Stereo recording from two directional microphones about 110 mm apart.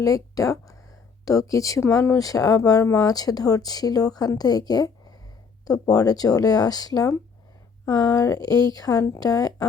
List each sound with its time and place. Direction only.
0.0 s speech: 30° left (ahead or behind)